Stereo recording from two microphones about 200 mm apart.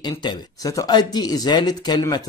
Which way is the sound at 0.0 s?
20° left (ahead or behind).